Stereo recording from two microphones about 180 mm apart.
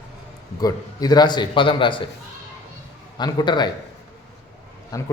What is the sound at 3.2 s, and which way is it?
Speech, 25° left (ahead or behind).